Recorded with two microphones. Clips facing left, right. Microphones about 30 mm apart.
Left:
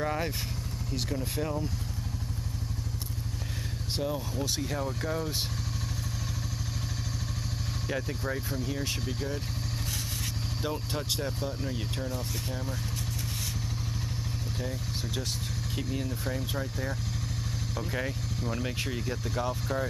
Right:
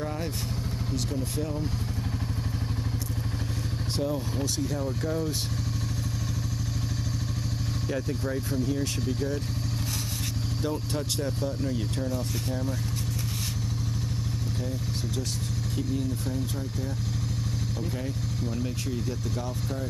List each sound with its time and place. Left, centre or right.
0.0 s speech: left
3.9 s speech: centre
7.9 s speech: centre
10.6 s speech: centre
14.6 s speech: centre
18.5 s speech: left